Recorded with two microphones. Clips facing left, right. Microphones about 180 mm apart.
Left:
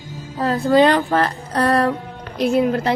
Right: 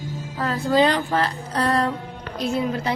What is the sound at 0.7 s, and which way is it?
Music, 60° left (ahead or behind).